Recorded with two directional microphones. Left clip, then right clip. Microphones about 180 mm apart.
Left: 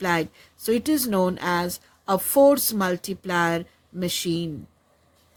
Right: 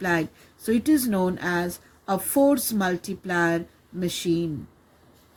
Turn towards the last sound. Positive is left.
turn(degrees=45)  # may be behind; listen again after turning